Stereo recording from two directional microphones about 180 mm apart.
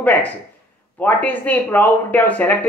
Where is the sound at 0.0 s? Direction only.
10° left (ahead or behind).